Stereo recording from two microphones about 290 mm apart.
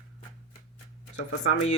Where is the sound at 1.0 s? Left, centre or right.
Left.